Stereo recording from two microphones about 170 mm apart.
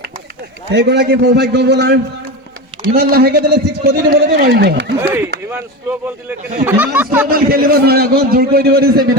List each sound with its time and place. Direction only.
0.7 s a man's voice: 90° right
2.9 s a man's voice: 65° right (ahead or behind)
4.9 s speech: 15° right (ahead or behind)
7.3 s a man's voice: 60° right (ahead or behind)